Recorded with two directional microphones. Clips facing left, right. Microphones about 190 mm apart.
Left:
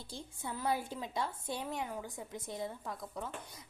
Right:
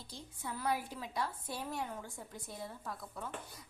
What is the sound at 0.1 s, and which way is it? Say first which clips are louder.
A woman's voice: left 2 dB; 25° left (ahead or behind).